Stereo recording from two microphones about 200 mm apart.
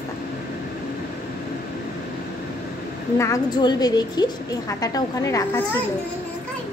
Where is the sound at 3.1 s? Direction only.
15° left (ahead or behind).